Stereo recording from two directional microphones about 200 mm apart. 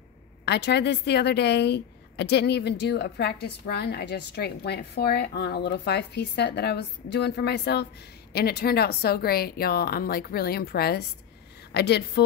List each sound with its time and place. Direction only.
0.5 s a woman's voice: 55° left (ahead or behind)